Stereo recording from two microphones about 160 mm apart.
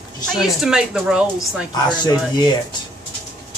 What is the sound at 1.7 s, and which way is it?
Speech, 25° left (ahead or behind).